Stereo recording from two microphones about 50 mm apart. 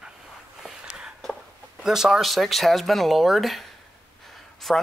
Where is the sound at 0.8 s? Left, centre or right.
Centre.